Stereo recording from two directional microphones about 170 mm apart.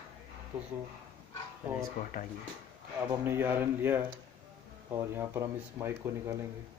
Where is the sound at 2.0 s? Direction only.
50° left (ahead or behind).